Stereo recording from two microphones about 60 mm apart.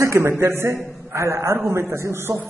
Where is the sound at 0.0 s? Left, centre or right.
Right.